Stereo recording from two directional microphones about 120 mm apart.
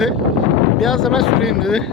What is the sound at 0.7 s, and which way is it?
Vehicle, 5° left (ahead or behind).